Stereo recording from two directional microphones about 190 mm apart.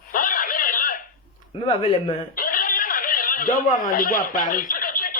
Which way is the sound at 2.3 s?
50° left (ahead or behind).